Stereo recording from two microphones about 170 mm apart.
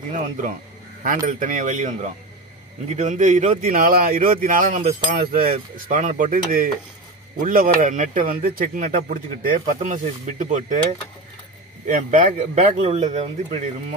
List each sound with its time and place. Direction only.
0.1 s speech: 45° right (ahead or behind)
5.1 s cutlery: 60° right (ahead or behind)
7.4 s speech: 55° right (ahead or behind)
12.5 s speech: 35° right (ahead or behind)